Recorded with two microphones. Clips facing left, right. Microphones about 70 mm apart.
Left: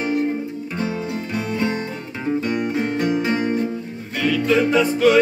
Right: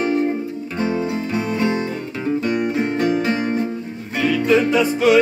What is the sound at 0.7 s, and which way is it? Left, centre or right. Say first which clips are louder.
Music: right 4 dB; right.